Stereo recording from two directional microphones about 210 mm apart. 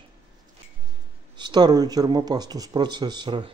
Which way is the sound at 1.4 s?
20° right (ahead or behind).